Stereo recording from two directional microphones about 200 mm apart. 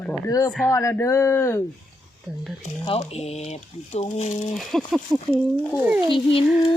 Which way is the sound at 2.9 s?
30° left (ahead or behind).